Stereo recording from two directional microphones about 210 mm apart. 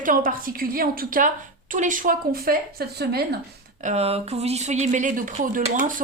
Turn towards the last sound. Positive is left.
turn(degrees=-35)  # may be behind; listen again after turning